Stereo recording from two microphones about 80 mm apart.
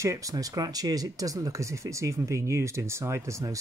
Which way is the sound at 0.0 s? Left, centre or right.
Right.